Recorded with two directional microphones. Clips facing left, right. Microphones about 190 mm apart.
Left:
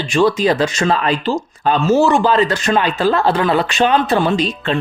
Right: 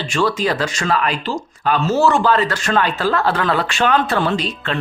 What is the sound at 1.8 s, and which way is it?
Speech, 15° left (ahead or behind).